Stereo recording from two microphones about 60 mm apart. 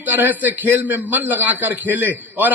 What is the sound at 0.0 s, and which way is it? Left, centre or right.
A man's voice, right.